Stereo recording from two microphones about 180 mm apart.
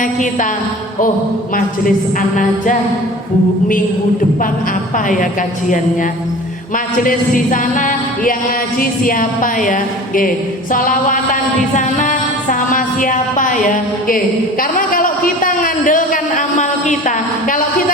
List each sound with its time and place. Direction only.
0.0 s a woman's voice: 45° left (ahead or behind)
5.0 s a woman's voice: 45° left (ahead or behind)
11.9 s music: 45° left (ahead or behind)
14.6 s a sound: 50° left (ahead or behind)